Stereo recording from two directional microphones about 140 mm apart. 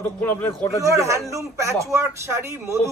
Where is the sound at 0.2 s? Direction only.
15° left (ahead or behind).